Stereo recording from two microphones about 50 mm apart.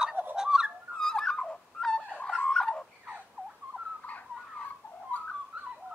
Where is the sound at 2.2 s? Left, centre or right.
Centre.